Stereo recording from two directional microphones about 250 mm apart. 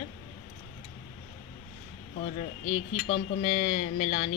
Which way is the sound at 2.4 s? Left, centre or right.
Left.